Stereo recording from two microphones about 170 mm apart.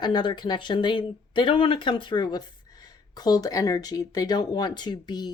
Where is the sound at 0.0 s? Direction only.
25° left (ahead or behind).